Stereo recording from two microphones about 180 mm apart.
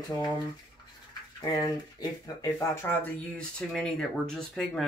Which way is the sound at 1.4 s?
20° left (ahead or behind).